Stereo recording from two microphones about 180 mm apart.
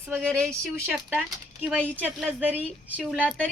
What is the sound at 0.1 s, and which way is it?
A woman's voice, 5° left (ahead or behind).